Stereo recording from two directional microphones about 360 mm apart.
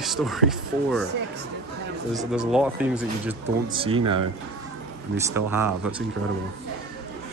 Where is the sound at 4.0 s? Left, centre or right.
Right.